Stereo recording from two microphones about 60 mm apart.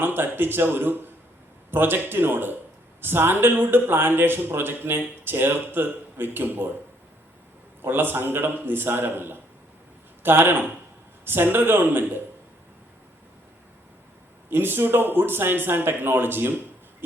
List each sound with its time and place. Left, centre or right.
0.0 s a man's voice: right
7.8 s a man's voice: right
14.5 s a man's voice: right